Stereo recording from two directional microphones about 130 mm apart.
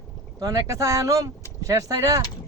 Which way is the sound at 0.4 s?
25° right (ahead or behind).